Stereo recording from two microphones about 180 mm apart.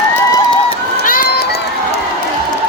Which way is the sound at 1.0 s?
50° left (ahead or behind).